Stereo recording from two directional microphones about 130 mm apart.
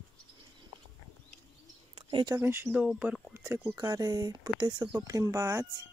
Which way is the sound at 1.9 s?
40° right (ahead or behind).